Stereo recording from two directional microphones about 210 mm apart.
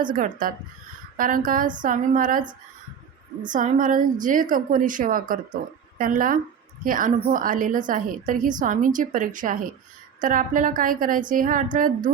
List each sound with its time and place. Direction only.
0.0 s a woman's voice: 40° right (ahead or behind)
3.5 s a woman's voice: 40° right (ahead or behind)